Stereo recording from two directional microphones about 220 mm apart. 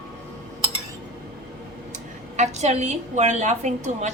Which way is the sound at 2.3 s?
30° right (ahead or behind).